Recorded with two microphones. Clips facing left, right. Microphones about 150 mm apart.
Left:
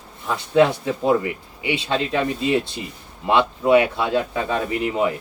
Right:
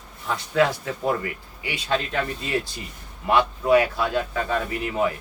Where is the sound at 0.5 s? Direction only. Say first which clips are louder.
Left 5 dB; 20° left (ahead or behind).